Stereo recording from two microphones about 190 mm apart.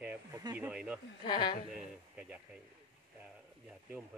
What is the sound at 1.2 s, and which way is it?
Speech, 25° left (ahead or behind).